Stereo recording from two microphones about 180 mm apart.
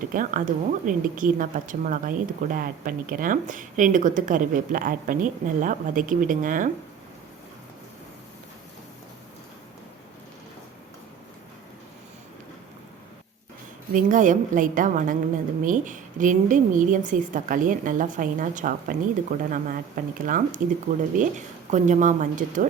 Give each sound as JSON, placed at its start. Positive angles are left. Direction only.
{"t": 0.0, "sound": "a woman's voice", "side_deg": -45}
{"t": 13.9, "sound": "a woman's voice", "side_deg": -45}